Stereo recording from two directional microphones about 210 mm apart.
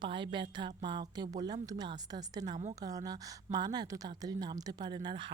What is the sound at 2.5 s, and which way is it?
Speech, 35° right (ahead or behind).